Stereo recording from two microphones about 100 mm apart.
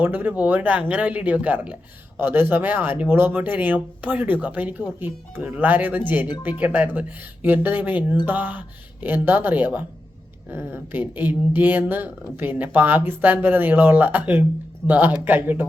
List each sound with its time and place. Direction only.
0.0 s speech: 20° right (ahead or behind)